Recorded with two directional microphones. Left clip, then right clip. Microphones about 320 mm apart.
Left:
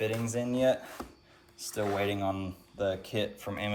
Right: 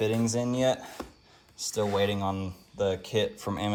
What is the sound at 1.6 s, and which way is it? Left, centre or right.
Speech, right.